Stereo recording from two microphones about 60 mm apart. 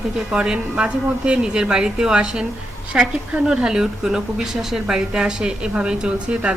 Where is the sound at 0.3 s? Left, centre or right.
Centre.